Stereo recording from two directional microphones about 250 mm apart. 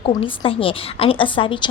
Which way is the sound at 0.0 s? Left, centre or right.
Left.